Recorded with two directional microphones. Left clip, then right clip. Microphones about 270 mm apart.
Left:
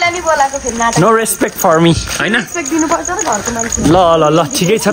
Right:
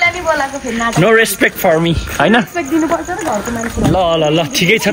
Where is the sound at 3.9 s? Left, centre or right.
Left.